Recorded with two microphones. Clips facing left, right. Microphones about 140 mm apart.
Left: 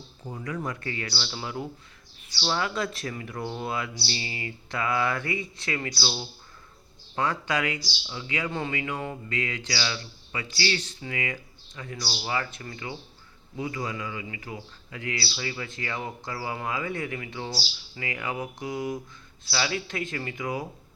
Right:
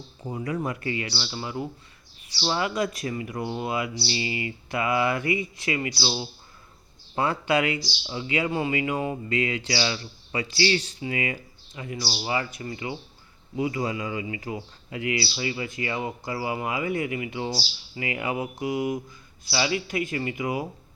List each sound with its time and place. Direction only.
0.2 s speech: 10° right (ahead or behind)
1.3 s speech: centre (ahead or behind)
2.4 s speech: 10° right (ahead or behind)
7.3 s speech: 15° right (ahead or behind)
7.6 s a man's voice: 25° right (ahead or behind)
8.5 s speech: 15° right (ahead or behind)
9.6 s a man's voice: 25° right (ahead or behind)
12.2 s speech: 10° right (ahead or behind)
13.6 s a man's voice: 25° right (ahead or behind)